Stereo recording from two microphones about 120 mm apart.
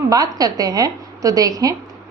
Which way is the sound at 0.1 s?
30° right (ahead or behind).